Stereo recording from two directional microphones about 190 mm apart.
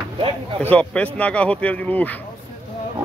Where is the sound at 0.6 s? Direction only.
5° left (ahead or behind).